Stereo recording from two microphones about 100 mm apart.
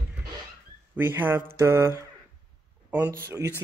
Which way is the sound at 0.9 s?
20° right (ahead or behind).